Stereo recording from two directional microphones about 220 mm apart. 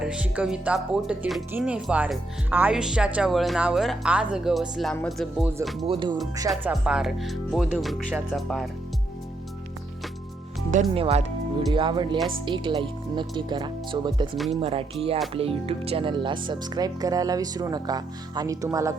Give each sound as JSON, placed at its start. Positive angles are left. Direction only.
{"t": 0.0, "sound": "speech", "side_deg": -5}
{"t": 5.8, "sound": "speech", "side_deg": -25}
{"t": 6.5, "sound": "speech", "side_deg": -5}
{"t": 10.9, "sound": "speech", "side_deg": -25}
{"t": 14.3, "sound": "speech", "side_deg": 0}
{"t": 14.6, "sound": "speech", "side_deg": -25}